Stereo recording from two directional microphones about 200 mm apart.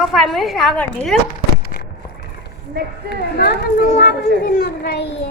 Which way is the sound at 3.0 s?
55° left (ahead or behind).